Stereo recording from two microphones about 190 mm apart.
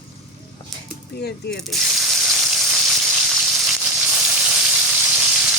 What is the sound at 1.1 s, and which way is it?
Speech, 60° left (ahead or behind).